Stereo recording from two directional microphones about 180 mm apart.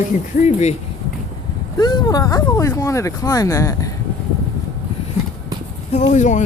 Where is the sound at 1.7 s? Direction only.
25° left (ahead or behind).